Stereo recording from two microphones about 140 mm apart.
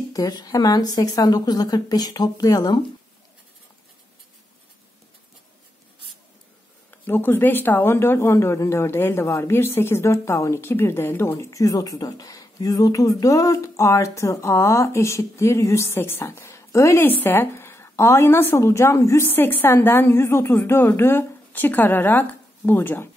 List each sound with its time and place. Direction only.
0.1 s speech: 25° left (ahead or behind)
6.9 s speech: 15° left (ahead or behind)